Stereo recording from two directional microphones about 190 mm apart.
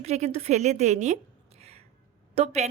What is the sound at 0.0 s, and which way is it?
Speech, 35° right (ahead or behind).